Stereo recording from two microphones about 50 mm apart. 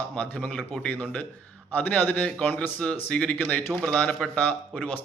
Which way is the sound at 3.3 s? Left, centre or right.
Left.